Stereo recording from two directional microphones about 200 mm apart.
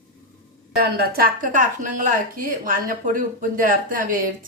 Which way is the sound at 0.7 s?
50° right (ahead or behind).